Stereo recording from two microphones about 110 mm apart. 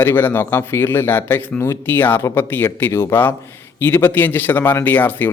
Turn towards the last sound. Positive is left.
turn(degrees=20)  # may be behind; listen again after turning